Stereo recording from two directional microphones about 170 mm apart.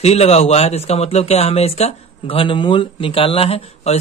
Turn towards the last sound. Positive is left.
turn(degrees=35)  # may be behind; listen again after turning